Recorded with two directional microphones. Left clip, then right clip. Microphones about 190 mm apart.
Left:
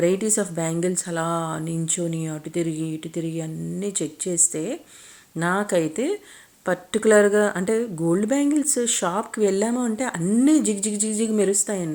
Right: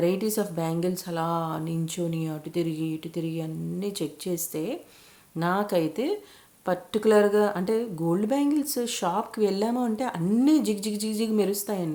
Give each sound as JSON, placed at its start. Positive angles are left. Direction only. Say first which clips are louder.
{"t": 0.0, "sound": "speech", "louder": "left 4 dB", "side_deg": 15}